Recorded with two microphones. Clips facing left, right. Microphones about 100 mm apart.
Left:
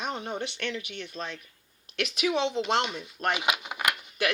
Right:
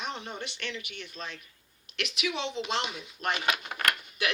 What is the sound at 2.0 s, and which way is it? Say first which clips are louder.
Speech: left 6 dB; 40° left (ahead or behind).